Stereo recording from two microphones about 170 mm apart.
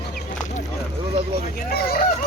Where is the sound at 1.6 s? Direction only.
60° left (ahead or behind).